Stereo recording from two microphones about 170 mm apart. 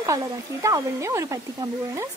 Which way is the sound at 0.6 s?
20° right (ahead or behind).